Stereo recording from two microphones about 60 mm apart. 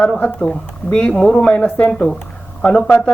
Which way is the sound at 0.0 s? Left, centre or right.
Centre.